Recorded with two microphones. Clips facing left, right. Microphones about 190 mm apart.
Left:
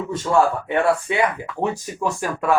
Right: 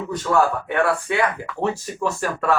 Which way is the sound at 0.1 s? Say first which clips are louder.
Left 1 dB; 25° left (ahead or behind).